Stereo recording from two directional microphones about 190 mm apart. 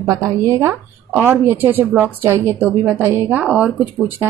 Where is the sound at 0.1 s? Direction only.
15° right (ahead or behind).